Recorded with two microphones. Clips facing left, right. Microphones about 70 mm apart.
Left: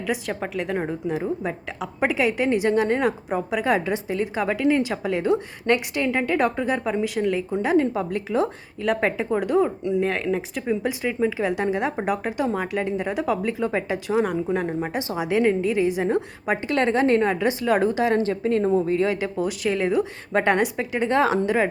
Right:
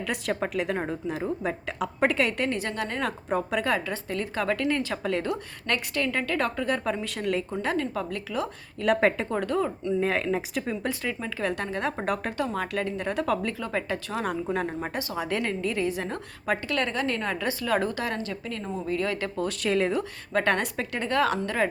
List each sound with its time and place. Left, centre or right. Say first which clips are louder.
0.0 s a woman's voice: left 2 dB; centre
2.5 s a woman's voice: left 10 dB; centre
3.1 s a woman's voice: left 3 dB; centre
3.7 s a woman's voice: left 5 dB; centre
7.5 s a woman's voice: left 7 dB; centre
8.8 s a woman's voice: even; centre
9.3 s a woman's voice: left 6 dB; centre
10.0 s a woman's voice: left 1 dB; centre
10.7 s a woman's voice: left 9 dB; centre
14.3 s a woman's voice: left 4 dB; centre
20.3 s a woman's voice: left 5 dB; centre
21.1 s a woman's voice: left 5 dB; left